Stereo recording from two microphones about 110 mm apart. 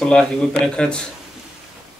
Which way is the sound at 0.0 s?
10° left (ahead or behind).